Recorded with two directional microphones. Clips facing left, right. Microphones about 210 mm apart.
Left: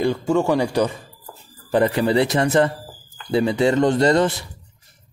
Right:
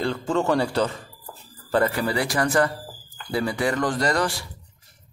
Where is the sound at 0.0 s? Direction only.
10° left (ahead or behind).